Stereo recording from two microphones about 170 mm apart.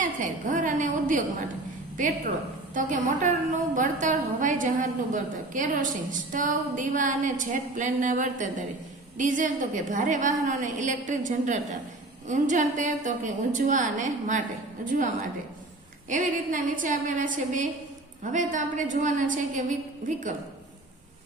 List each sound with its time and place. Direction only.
0.0 s a sound: 50° right (ahead or behind)
2.0 s a woman's voice: 50° right (ahead or behind)
16.0 s a woman's voice: 50° right (ahead or behind)